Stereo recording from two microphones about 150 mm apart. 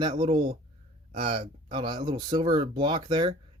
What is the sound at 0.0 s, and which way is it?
Speech, 35° right (ahead or behind).